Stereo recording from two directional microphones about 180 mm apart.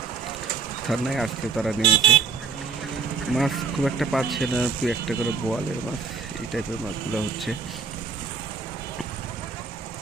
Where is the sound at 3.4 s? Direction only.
Centre (ahead or behind).